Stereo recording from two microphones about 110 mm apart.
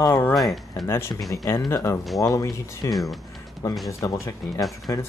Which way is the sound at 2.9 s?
Centre (ahead or behind).